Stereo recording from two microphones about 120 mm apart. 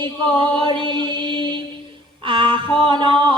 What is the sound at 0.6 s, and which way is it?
Mantra, 45° right (ahead or behind).